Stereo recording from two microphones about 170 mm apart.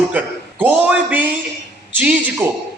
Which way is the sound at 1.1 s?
10° right (ahead or behind).